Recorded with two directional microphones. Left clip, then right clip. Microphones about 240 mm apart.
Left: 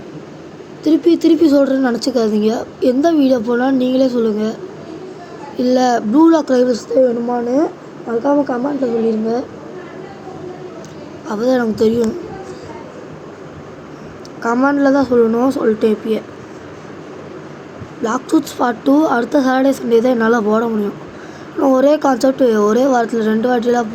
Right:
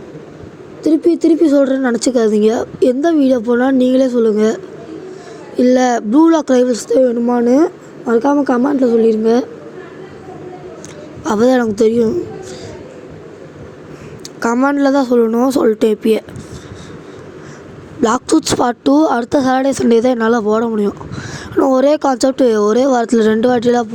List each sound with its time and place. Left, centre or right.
0.9 s a woman's voice: centre; by 9.4 s right
11.3 s speech: right
14.4 s speech: right
18.0 s speech: right